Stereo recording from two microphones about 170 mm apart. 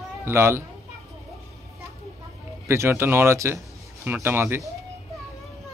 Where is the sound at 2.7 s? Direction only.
15° right (ahead or behind).